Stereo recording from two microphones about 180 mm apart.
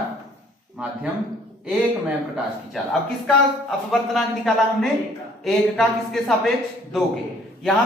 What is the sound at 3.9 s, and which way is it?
A man's voice, centre (ahead or behind).